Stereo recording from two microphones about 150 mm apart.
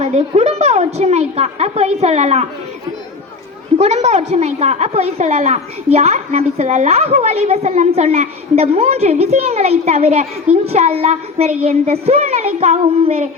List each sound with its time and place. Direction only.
0.0 s a woman's voice: 45° right (ahead or behind)
3.8 s a woman's voice: 50° right (ahead or behind)